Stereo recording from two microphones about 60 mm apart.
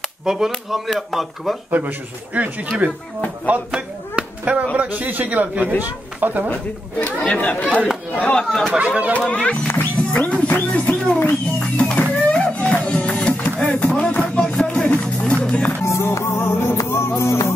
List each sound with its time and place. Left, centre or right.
0.2 s speech: centre
1.7 s speech: right
6.5 s speech: left
8.5 s speech: centre
8.7 s speech: right
9.3 s speech: centre
9.8 s music: left
10.7 s speech: left
11.7 s music: left
15.4 s speech: centre
15.8 s music: left